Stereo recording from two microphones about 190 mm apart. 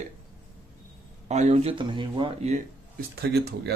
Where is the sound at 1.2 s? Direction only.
35° right (ahead or behind).